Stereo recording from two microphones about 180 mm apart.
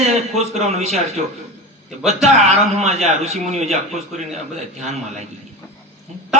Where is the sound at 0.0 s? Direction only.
35° right (ahead or behind).